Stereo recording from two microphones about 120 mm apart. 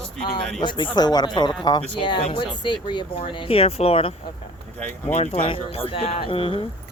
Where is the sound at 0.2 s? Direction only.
45° left (ahead or behind).